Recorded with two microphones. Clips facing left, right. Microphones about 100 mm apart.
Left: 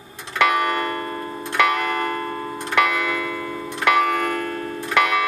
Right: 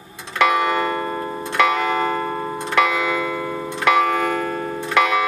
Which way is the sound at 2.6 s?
15° right (ahead or behind).